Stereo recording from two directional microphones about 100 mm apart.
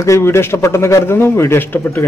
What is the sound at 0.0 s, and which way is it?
A man's voice, 30° left (ahead or behind).